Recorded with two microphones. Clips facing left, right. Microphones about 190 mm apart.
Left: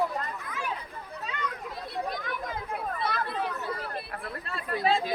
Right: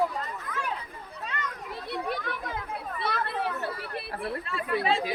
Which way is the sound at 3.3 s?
65° right (ahead or behind).